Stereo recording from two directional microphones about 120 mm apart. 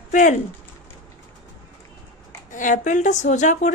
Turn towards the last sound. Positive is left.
turn(degrees=90)